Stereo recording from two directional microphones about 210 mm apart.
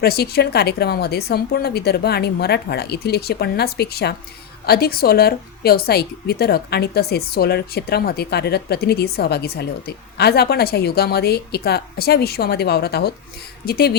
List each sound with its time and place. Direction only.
0.0 s a woman's voice: 50° left (ahead or behind)